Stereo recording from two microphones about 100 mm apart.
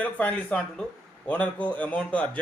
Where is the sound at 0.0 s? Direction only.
15° left (ahead or behind).